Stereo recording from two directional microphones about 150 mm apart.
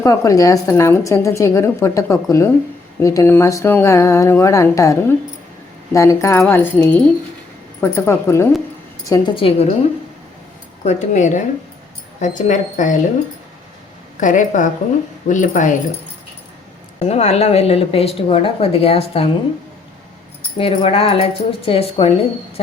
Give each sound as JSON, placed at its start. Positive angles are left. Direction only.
{"t": 0.0, "sound": "a woman's voice", "side_deg": 20}
{"t": 9.3, "sound": "speech", "side_deg": 40}
{"t": 10.8, "sound": "a woman's voice", "side_deg": 55}
{"t": 14.2, "sound": "speech", "side_deg": 60}
{"t": 17.0, "sound": "a woman's voice", "side_deg": 45}
{"t": 20.6, "sound": "speech", "side_deg": 40}